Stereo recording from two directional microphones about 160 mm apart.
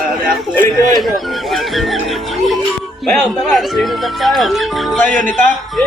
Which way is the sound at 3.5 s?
Centre (ahead or behind).